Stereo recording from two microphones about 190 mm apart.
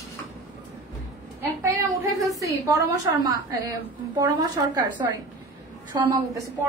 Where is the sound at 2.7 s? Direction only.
15° right (ahead or behind).